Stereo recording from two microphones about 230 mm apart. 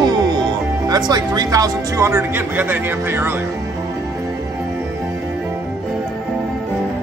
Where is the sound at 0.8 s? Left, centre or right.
Centre.